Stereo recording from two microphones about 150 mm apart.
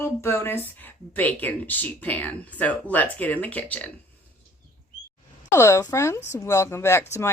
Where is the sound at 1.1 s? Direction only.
10° left (ahead or behind).